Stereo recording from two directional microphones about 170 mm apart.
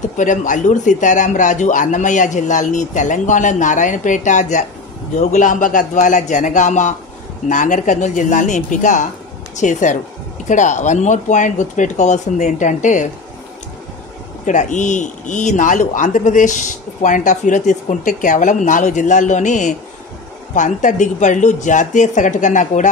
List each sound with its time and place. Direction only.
0.2 s speech: 45° left (ahead or behind)
14.4 s speech: 45° left (ahead or behind)